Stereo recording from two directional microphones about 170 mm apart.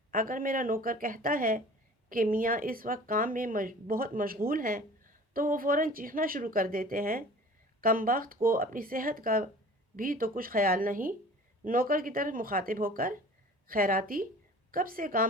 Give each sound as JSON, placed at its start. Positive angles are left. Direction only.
{"t": 0.1, "sound": "speech", "side_deg": -55}